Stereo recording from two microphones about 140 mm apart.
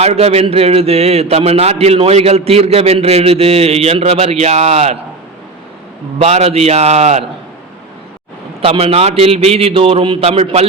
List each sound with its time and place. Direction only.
0.0 s a man's voice: 50° right (ahead or behind)
6.1 s a man's voice: 50° right (ahead or behind)
8.6 s a man's voice: 45° right (ahead or behind)